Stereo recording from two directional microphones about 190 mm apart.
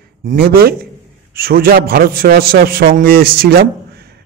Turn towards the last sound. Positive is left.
turn(degrees=-55)  # may be behind; listen again after turning